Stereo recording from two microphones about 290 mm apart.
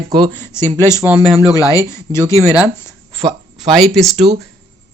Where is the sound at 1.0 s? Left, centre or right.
Centre.